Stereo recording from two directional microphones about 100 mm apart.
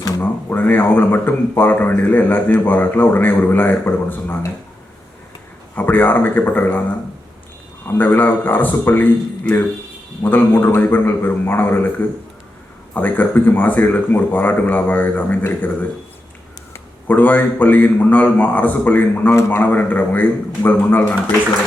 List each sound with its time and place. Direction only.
0.2 s speech: 15° left (ahead or behind)
5.7 s speech: 20° left (ahead or behind)
7.9 s a man's voice: 20° left (ahead or behind)
17.1 s a man's voice: 15° left (ahead or behind)